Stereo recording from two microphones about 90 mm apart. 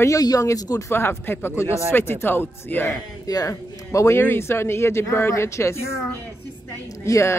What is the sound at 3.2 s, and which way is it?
Speech, 40° left (ahead or behind).